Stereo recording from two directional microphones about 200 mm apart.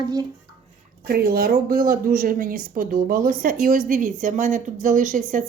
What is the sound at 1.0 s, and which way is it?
A woman's voice, 50° right (ahead or behind).